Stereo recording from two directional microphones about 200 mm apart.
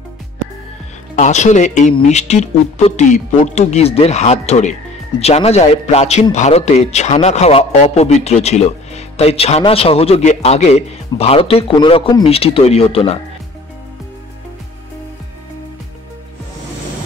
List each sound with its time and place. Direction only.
1.1 s a man's voice: 35° left (ahead or behind)